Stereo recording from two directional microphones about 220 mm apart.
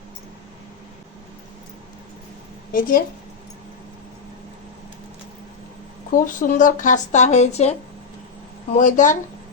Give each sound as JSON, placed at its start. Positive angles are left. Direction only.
{"t": 2.7, "sound": "speech", "side_deg": 40}
{"t": 6.1, "sound": "speech", "side_deg": 35}